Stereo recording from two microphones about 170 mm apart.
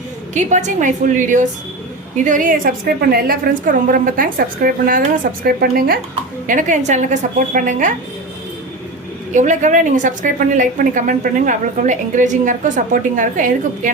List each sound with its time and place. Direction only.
0.3 s a woman's voice: 45° right (ahead or behind); by 6.0 s 60° right (ahead or behind)
6.5 s a woman's voice: 45° right (ahead or behind)
9.3 s a woman's voice: 45° right (ahead or behind)